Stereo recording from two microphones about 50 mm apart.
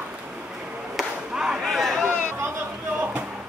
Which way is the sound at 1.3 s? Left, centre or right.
Centre.